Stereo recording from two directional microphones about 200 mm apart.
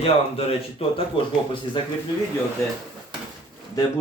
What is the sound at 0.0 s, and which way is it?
A man's voice, 30° left (ahead or behind).